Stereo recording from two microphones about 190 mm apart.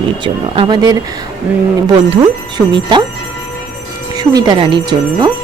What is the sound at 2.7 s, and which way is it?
Speech, 25° right (ahead or behind).